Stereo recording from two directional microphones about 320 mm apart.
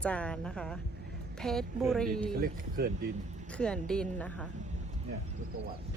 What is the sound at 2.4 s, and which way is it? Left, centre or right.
Speech, right.